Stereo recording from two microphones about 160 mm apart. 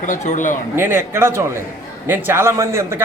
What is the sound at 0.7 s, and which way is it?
A man's voice, 15° right (ahead or behind).